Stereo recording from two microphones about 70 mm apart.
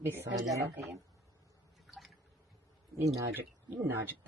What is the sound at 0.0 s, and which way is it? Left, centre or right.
Speech, right.